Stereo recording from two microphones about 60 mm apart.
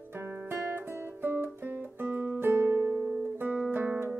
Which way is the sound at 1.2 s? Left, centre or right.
Right.